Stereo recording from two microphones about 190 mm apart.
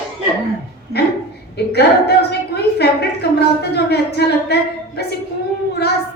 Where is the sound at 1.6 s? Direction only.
60° left (ahead or behind).